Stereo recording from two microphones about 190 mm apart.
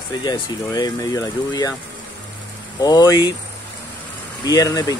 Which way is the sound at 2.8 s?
20° left (ahead or behind).